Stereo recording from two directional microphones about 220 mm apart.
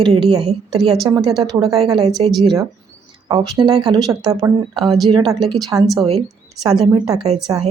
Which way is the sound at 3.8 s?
15° right (ahead or behind).